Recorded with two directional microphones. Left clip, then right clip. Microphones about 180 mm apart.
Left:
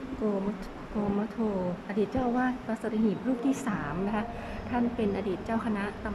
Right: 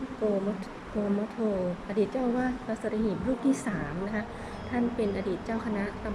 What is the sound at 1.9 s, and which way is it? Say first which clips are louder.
Speech: even; centre (ahead or behind).